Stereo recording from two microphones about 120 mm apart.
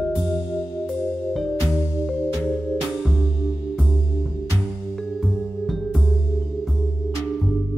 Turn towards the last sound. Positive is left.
turn(degrees=0)  # may be behind; listen again after turning